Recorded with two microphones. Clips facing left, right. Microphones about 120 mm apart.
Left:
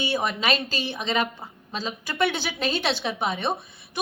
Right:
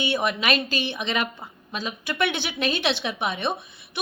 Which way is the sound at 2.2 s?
60° right (ahead or behind).